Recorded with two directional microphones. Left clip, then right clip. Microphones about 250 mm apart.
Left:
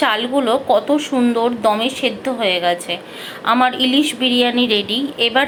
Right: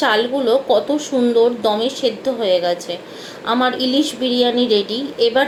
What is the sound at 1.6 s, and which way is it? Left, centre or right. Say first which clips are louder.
Speech: left 2 dB; centre.